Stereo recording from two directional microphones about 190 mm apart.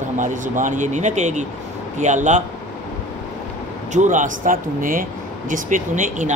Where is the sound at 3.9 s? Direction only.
40° right (ahead or behind).